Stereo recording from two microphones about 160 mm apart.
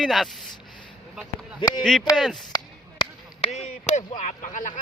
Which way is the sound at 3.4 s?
45° left (ahead or behind).